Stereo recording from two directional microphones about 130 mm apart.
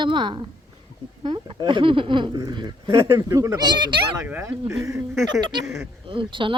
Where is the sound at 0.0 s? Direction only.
35° right (ahead or behind).